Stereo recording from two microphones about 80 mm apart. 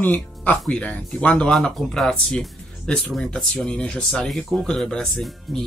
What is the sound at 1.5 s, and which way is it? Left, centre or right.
Speech, centre.